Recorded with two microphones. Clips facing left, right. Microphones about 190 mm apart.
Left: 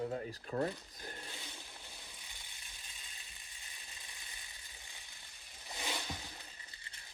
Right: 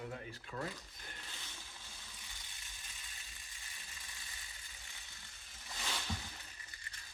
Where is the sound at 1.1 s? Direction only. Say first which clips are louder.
Left 5 dB; 15° left (ahead or behind).